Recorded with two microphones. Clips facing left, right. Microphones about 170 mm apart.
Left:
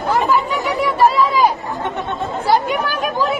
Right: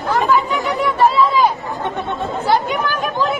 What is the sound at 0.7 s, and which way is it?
Chatter, 10° left (ahead or behind).